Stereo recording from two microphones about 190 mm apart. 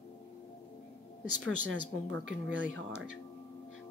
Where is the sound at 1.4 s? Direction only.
90° right.